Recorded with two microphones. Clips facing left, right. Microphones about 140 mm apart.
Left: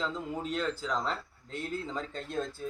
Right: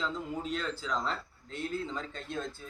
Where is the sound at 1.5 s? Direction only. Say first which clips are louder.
Right 1 dB; 45° left (ahead or behind).